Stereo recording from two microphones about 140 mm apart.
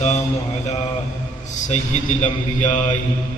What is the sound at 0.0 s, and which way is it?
Mantra, 55° left (ahead or behind).